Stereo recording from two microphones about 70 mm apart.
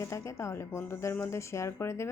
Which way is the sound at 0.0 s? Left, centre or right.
Left.